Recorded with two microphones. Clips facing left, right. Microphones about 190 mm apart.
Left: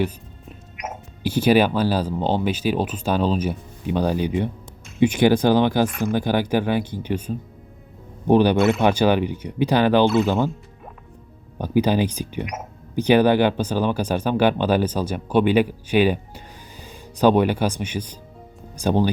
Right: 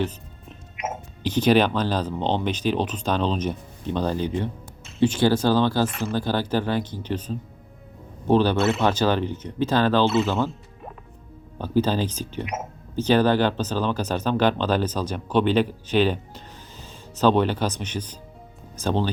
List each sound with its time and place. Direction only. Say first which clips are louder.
1.2 s speech: left 2 dB; 10° left (ahead or behind)
11.5 s speech: left 3 dB; 15° left (ahead or behind)